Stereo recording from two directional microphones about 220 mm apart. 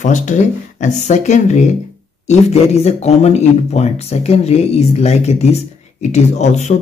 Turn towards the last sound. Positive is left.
turn(degrees=30)  # may be behind; listen again after turning